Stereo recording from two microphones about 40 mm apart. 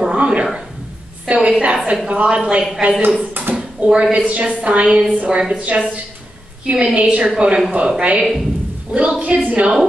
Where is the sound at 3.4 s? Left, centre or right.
Right.